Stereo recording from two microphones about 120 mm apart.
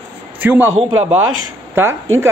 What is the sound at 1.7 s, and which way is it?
Speech, 20° right (ahead or behind).